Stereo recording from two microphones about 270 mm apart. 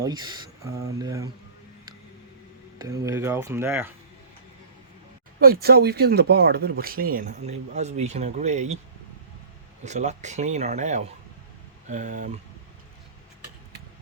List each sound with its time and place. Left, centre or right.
0.0 s speech: centre
2.7 s speech: centre
5.4 s speech: right
9.8 s speech: right